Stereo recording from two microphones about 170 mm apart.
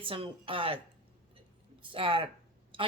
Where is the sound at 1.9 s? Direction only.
30° right (ahead or behind).